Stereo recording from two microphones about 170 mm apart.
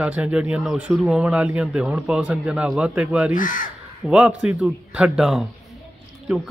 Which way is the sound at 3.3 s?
50° left (ahead or behind).